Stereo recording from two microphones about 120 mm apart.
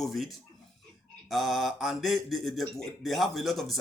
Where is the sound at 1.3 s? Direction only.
Centre (ahead or behind).